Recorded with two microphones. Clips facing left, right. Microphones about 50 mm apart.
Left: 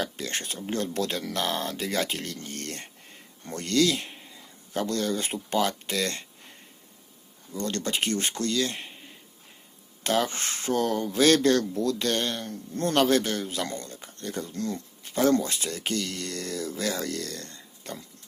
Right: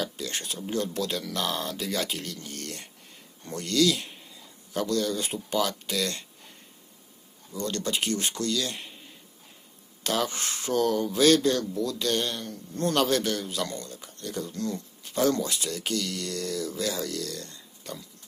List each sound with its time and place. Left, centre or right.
0.0 s speech: left
7.5 s speech: left
10.0 s speech: left
11.4 s speech: left